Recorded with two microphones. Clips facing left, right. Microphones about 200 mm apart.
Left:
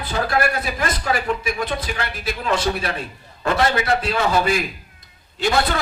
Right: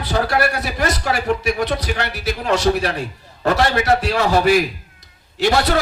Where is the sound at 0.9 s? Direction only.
70° right (ahead or behind).